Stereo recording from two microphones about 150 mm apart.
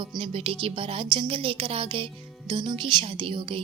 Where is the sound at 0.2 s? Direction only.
35° right (ahead or behind).